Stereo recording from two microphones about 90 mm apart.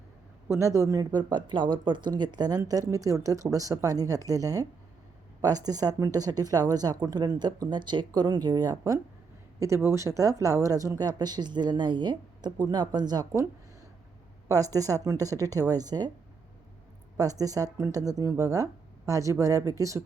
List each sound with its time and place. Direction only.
0.4 s speech: 35° right (ahead or behind)
1.2 s speech: 60° right (ahead or behind)
14.4 s speech: 40° right (ahead or behind)
17.2 s speech: 40° right (ahead or behind)